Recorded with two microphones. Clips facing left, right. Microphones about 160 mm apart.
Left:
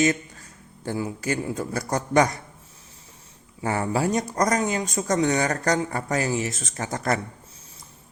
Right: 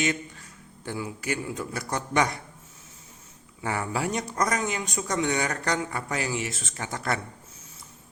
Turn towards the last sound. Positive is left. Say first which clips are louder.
# left 4 dB
turn(degrees=40)  # may be behind; listen again after turning